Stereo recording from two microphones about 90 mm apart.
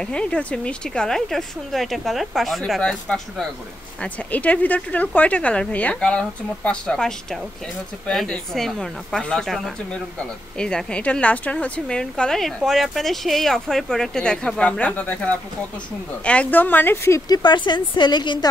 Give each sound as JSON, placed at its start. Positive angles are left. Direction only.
{"t": 0.0, "sound": "a woman's voice", "side_deg": 10}
{"t": 16.3, "sound": "a woman's voice", "side_deg": 15}
{"t": 17.3, "sound": "speech", "side_deg": 55}